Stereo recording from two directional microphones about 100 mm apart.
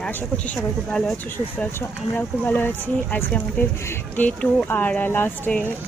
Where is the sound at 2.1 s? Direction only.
15° left (ahead or behind).